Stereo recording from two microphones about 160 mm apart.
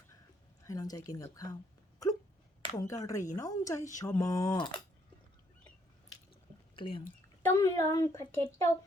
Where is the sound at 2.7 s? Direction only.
20° left (ahead or behind).